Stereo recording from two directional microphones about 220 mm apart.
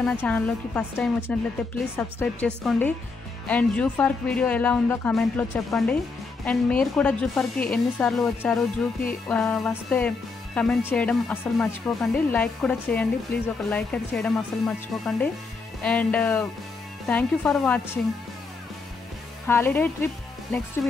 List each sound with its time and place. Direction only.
0.0 s speech: 5° left (ahead or behind)
19.4 s speech: 10° left (ahead or behind)